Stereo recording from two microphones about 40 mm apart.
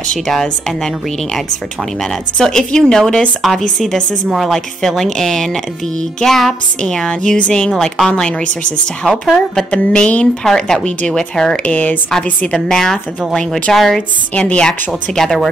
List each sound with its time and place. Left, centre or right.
0.3 s speech: centre
6.9 s speech: centre
7.3 s a sound: left
9.7 s a sound: left
10.4 s speech: centre
11.6 s speech: left
12.5 s speech: centre
14.3 s a sound: left
15.1 s speech: centre